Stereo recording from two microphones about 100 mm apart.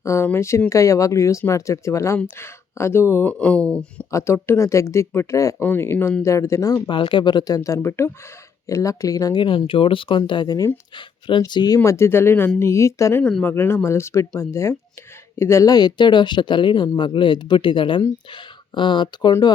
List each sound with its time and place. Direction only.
0.0 s speech: 30° left (ahead or behind)
3.3 s speech: 10° left (ahead or behind)
4.1 s speech: 25° left (ahead or behind); by 11.8 s 45° left (ahead or behind)
11.8 s speech: 25° left (ahead or behind); by 19.5 s 45° left (ahead or behind)